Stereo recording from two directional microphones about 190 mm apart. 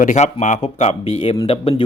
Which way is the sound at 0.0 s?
40° left (ahead or behind).